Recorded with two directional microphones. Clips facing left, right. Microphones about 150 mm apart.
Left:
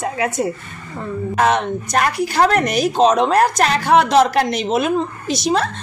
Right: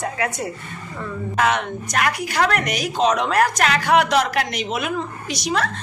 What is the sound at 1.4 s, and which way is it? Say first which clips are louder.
Speech: left 4 dB; 35° left (ahead or behind).